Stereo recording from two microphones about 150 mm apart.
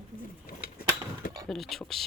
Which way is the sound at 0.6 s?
75° left (ahead or behind).